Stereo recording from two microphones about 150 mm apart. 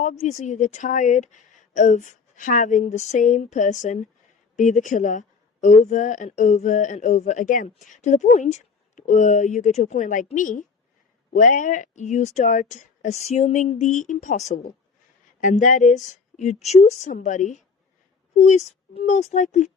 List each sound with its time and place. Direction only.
0.0 s a woman's voice: 55° left (ahead or behind)